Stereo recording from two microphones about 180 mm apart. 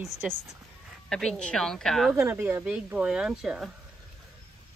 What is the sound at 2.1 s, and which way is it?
Speech, 15° right (ahead or behind).